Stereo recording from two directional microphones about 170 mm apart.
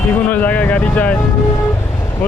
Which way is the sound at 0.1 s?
10° left (ahead or behind).